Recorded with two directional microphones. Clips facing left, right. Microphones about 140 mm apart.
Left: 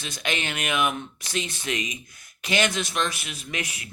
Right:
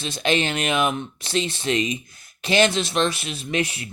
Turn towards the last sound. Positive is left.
turn(degrees=-30)  # may be behind; listen again after turning